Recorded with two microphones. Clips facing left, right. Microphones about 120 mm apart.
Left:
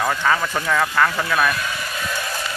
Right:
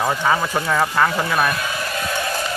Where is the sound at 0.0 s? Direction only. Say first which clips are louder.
Right 1 dB; 15° right (ahead or behind).